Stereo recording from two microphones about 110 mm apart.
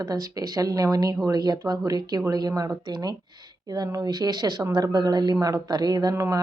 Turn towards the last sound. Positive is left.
turn(degrees=-30)  # may be behind; listen again after turning